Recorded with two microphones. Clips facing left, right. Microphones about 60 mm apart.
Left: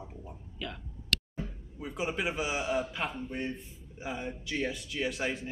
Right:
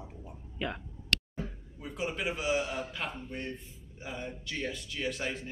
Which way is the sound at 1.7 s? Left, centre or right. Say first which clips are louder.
Left 2 dB; centre.